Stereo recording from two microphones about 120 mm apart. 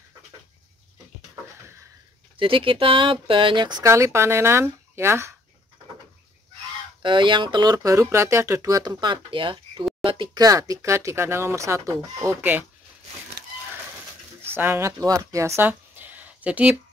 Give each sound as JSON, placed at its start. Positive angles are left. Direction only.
{"t": 2.3, "sound": "speech", "side_deg": -45}
{"t": 3.8, "sound": "speech", "side_deg": -25}
{"t": 7.0, "sound": "speech", "side_deg": -40}
{"t": 10.4, "sound": "speech", "side_deg": -30}
{"t": 14.5, "sound": "speech", "side_deg": -20}